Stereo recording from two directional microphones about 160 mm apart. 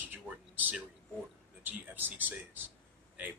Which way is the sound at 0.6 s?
10° right (ahead or behind).